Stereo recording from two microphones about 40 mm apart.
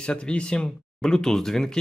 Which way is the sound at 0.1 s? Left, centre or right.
Left.